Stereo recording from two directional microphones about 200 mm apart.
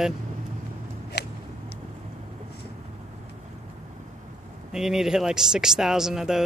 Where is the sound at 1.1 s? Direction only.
55° left (ahead or behind).